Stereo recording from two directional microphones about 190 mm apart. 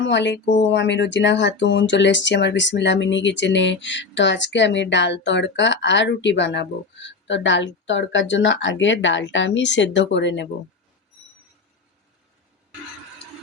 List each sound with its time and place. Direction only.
0.0 s speech: 70° left (ahead or behind)